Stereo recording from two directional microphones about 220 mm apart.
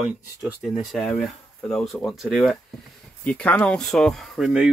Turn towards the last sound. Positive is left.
turn(degrees=-5)  # may be behind; listen again after turning